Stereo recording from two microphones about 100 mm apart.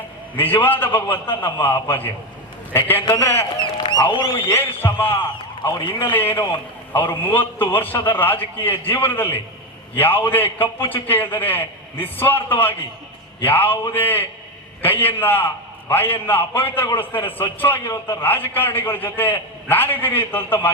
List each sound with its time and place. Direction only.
0.3 s a man's voice: 20° left (ahead or behind)
3.6 s a sound: 50° left (ahead or behind)
4.4 s a man's voice: 20° left (ahead or behind)